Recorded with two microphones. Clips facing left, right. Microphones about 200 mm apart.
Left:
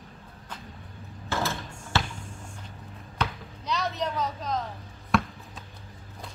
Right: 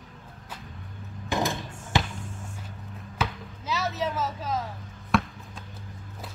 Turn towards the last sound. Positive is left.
turn(degrees=0)  # may be behind; listen again after turning